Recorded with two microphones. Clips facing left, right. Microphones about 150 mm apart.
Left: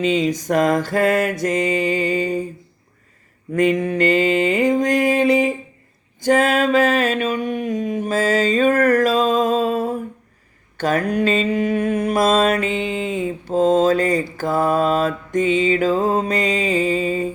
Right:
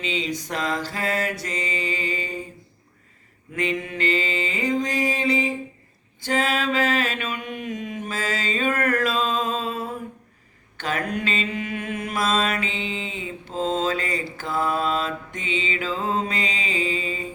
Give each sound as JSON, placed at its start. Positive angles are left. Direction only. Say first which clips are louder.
{"t": 0.0, "sound": "mantra", "louder": "left 9 dB", "side_deg": 45}
{"t": 3.5, "sound": "mantra", "louder": "left 9 dB", "side_deg": 45}
{"t": 6.2, "sound": "a sound", "louder": "left 8 dB", "side_deg": 45}
{"t": 10.8, "sound": "mantra", "louder": "left 8 dB", "side_deg": 40}